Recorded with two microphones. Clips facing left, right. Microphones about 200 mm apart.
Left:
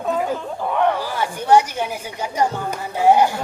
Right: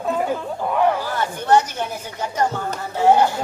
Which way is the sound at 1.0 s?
10° left (ahead or behind).